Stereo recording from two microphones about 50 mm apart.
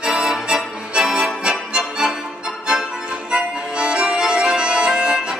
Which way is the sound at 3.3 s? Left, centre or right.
Centre.